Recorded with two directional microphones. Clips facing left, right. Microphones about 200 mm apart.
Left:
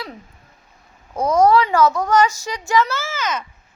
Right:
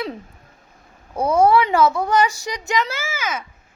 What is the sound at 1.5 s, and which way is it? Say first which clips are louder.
A woman's voice: even; 20° right (ahead or behind).